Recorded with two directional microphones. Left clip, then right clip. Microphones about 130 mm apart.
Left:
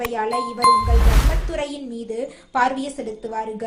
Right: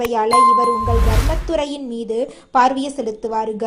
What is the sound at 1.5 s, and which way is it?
A woman's voice, 40° right (ahead or behind).